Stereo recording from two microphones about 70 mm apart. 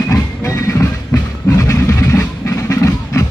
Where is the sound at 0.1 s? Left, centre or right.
Left.